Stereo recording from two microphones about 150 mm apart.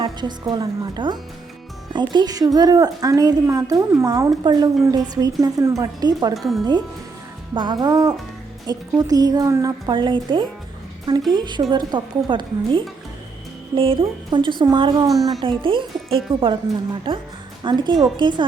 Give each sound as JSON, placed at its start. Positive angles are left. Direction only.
{"t": 0.0, "sound": "a woman's voice", "side_deg": -30}
{"t": 6.3, "sound": "speech", "side_deg": 0}
{"t": 7.5, "sound": "a woman's voice", "side_deg": -30}
{"t": 15.4, "sound": "a woman's voice", "side_deg": -35}